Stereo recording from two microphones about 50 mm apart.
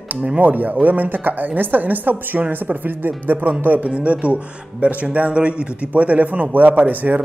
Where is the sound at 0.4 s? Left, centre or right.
Right.